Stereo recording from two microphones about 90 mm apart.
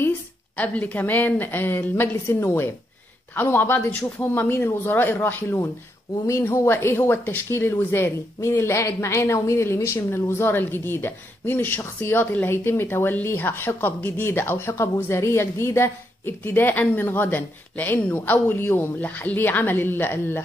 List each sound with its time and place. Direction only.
0.6 s a woman's voice: 15° left (ahead or behind)